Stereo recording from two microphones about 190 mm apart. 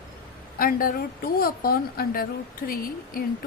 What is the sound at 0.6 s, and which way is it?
A woman's voice, 50° left (ahead or behind).